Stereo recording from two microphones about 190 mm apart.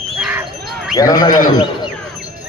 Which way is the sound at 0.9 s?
20° left (ahead or behind).